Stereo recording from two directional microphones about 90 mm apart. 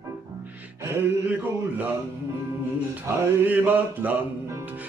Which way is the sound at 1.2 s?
20° right (ahead or behind).